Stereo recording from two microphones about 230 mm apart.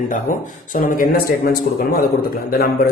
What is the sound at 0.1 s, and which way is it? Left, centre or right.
A man's voice, left.